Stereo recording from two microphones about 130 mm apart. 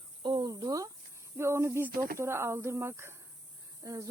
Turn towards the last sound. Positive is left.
turn(degrees=-25)  # may be behind; listen again after turning